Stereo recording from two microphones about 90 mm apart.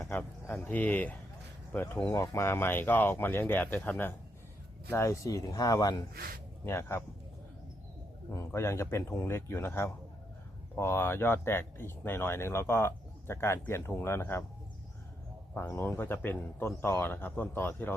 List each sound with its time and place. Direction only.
0.0 s speech: 15° left (ahead or behind)
2.0 s speech: 40° left (ahead or behind)
6.7 s speech: 30° left (ahead or behind)
8.3 s speech: 30° left (ahead or behind)
15.7 s speech: 25° left (ahead or behind)